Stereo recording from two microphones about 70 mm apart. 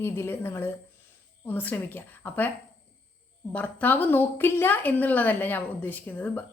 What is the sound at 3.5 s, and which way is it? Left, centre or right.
A woman's voice, left.